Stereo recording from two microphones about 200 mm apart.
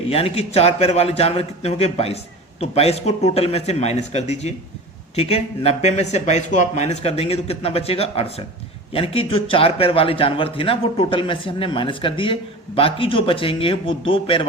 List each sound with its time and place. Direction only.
0.1 s a man's voice: 30° left (ahead or behind)